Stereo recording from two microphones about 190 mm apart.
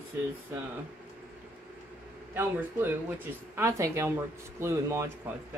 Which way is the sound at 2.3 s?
10° right (ahead or behind).